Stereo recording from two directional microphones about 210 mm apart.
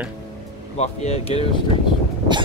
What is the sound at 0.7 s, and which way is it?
Speech, 30° left (ahead or behind).